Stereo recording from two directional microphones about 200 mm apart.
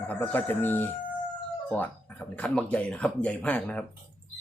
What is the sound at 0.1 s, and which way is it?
Speech, 10° left (ahead or behind).